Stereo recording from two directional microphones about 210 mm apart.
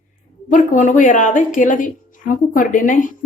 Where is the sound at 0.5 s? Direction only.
35° left (ahead or behind).